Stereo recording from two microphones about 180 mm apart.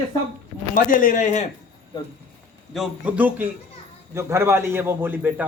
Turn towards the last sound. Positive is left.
turn(degrees=-10)  # may be behind; listen again after turning